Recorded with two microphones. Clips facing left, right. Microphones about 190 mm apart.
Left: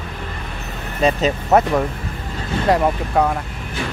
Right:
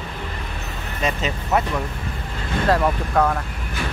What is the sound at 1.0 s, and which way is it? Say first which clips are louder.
Speech: left 7 dB; 35° left (ahead or behind).